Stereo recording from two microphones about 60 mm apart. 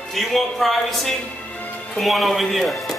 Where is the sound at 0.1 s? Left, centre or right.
Centre.